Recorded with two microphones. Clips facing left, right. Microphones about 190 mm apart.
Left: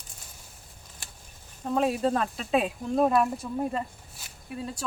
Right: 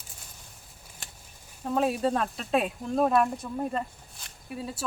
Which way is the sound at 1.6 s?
Centre (ahead or behind).